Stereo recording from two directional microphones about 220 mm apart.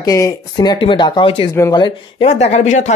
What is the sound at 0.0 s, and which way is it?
Speech, 15° left (ahead or behind).